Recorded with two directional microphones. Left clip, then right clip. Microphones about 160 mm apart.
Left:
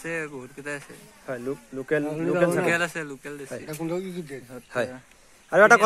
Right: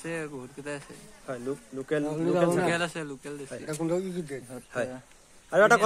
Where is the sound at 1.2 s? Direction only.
50° left (ahead or behind).